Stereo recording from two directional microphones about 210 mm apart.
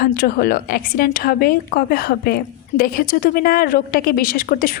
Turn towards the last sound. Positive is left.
turn(degrees=45)  # may be behind; listen again after turning